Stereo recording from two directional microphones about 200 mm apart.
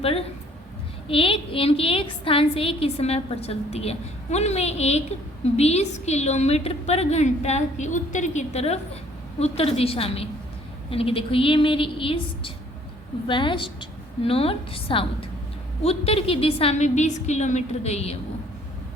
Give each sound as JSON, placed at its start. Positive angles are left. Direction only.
{"t": 0.0, "sound": "a woman's voice", "side_deg": 30}